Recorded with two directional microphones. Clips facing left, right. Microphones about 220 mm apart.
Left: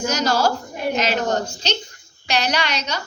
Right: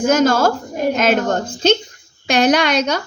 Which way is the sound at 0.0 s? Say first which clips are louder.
Right 6 dB; 50° right (ahead or behind).